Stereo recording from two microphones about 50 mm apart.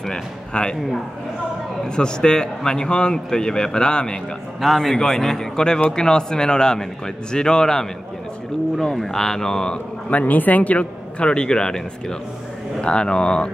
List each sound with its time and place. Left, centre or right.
0.0 s speech: centre
2.0 s a man's voice: centre
4.6 s a man's voice: centre
8.7 s a man's voice: centre
10.0 s a man's voice: left